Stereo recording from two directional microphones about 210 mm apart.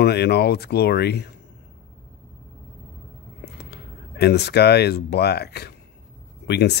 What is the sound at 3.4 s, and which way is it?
Speech, 50° left (ahead or behind).